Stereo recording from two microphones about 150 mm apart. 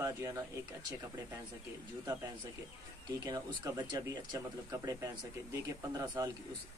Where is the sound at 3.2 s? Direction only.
25° right (ahead or behind).